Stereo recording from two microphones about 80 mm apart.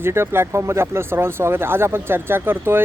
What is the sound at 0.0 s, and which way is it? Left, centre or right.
Speech, right.